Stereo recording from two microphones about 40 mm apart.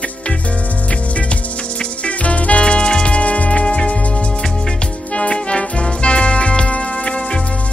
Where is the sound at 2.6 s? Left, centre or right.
Left.